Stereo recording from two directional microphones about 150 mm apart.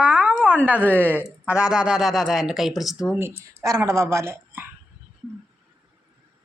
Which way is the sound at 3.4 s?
20° right (ahead or behind).